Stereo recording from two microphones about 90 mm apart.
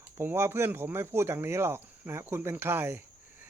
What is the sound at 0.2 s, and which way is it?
Speech, 25° right (ahead or behind).